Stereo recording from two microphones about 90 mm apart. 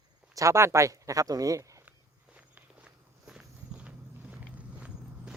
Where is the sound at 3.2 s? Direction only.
10° right (ahead or behind).